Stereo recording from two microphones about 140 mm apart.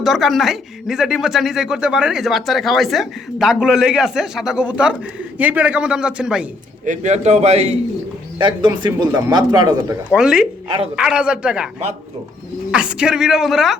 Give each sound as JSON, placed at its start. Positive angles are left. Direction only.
{"t": 0.0, "sound": "a man's voice", "side_deg": 0}
{"t": 6.8, "sound": "a man's voice", "side_deg": -60}
{"t": 8.4, "sound": "speech", "side_deg": -35}
{"t": 10.1, "sound": "a man's voice", "side_deg": -5}
{"t": 12.7, "sound": "speech", "side_deg": -5}